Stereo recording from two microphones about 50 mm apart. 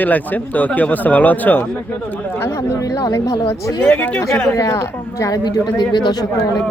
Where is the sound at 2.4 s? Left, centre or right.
Left.